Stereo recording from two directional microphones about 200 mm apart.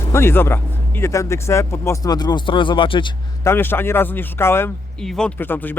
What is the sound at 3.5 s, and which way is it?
Speech, 10° left (ahead or behind).